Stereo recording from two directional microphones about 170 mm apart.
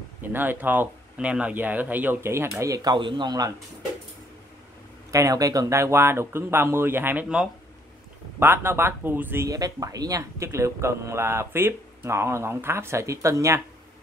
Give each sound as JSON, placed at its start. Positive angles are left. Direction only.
{"t": 0.2, "sound": "speech", "side_deg": -10}
{"t": 5.1, "sound": "speech", "side_deg": -20}